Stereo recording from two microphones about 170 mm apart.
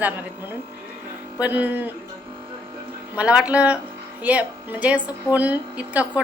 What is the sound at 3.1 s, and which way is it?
A woman's voice, 5° right (ahead or behind).